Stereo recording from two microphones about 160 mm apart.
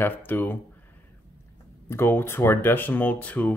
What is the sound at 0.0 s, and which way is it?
Speech, 10° left (ahead or behind).